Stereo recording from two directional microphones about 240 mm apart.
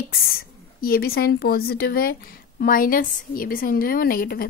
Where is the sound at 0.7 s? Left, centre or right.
Left.